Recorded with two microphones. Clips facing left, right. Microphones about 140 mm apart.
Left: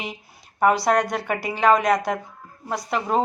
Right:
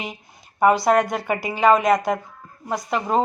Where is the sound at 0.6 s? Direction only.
Centre (ahead or behind).